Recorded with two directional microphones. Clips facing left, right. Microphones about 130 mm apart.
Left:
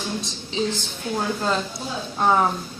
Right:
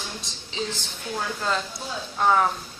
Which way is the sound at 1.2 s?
25° left (ahead or behind).